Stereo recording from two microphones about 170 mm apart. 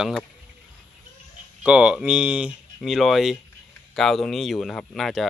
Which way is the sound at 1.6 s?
5° right (ahead or behind).